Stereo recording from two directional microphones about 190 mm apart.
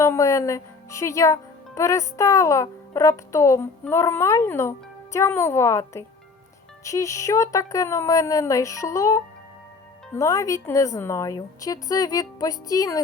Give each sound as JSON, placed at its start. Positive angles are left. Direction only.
{"t": 0.0, "sound": "speech", "side_deg": 15}